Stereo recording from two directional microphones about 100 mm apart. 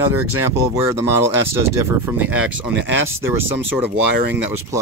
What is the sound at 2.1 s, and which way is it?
Speech, 15° right (ahead or behind).